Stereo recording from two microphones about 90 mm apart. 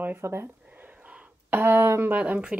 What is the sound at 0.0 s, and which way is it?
Speech, 25° right (ahead or behind).